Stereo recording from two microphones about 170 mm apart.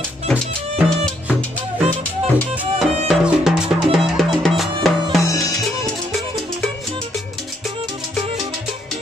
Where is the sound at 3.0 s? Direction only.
5° right (ahead or behind).